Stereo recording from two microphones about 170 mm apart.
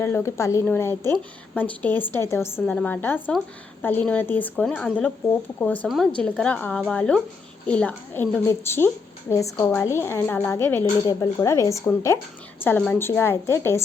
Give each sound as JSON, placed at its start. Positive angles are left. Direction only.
{"t": 0.0, "sound": "a woman's voice", "side_deg": 15}